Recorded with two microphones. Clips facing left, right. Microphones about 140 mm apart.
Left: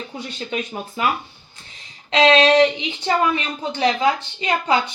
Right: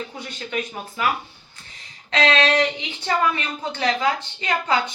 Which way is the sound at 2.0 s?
20° left (ahead or behind).